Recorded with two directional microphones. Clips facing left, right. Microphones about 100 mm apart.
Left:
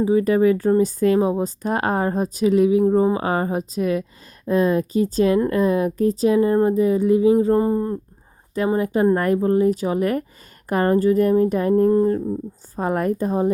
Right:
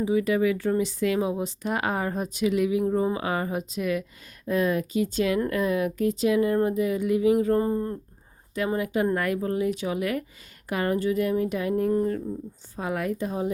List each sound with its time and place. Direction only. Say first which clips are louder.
0.0 s speech: left 6 dB; 40° left (ahead or behind); by 7.9 s 25° left (ahead or behind)
8.5 s speech: left 6 dB; 35° left (ahead or behind)
12.7 s a woman's voice: left 7 dB; 45° left (ahead or behind)